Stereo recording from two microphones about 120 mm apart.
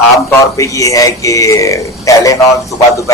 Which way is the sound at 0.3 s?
25° left (ahead or behind).